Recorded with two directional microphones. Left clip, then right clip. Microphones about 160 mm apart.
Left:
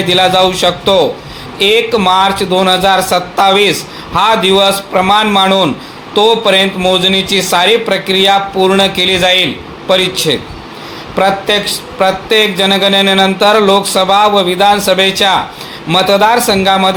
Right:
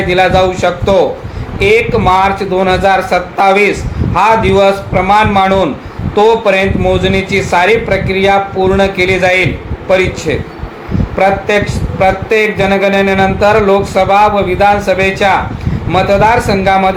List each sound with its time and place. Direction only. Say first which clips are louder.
0.1 s speech: left 1 dB; 30° left (ahead or behind)